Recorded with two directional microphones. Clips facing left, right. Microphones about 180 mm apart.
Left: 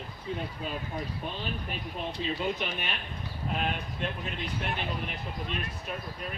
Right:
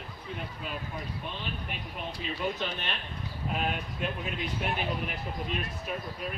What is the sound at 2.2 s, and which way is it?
Speech, 25° left (ahead or behind).